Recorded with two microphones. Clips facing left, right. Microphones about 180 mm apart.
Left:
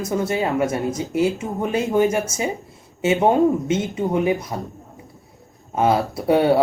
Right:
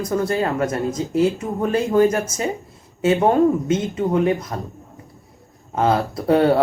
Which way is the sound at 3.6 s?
25° left (ahead or behind).